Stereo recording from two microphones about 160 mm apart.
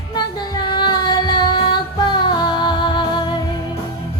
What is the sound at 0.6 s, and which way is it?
Music, 30° left (ahead or behind).